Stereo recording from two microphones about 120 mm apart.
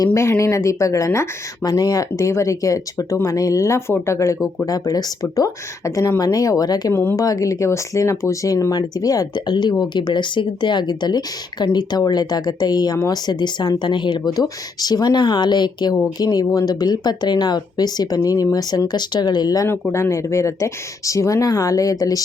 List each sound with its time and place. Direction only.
0.0 s speech: 25° left (ahead or behind)
19.9 s speech: 25° left (ahead or behind)